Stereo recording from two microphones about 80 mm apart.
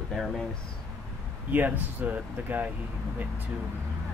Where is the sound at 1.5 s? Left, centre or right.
Right.